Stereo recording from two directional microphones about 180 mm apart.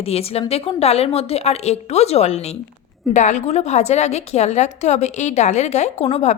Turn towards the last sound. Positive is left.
turn(degrees=35)  # may be behind; listen again after turning